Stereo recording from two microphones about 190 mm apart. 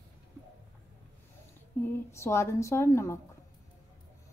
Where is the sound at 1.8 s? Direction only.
15° left (ahead or behind).